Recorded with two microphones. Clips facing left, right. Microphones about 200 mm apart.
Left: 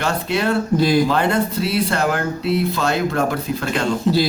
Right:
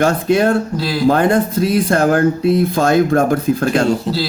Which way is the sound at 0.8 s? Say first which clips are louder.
Left 5 dB; 20° left (ahead or behind).